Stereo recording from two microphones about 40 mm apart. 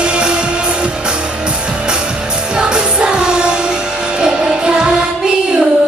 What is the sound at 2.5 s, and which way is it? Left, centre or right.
Music, right.